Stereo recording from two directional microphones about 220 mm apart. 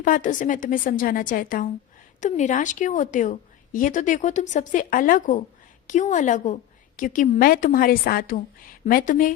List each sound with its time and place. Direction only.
0.0 s a woman's voice: 35° left (ahead or behind)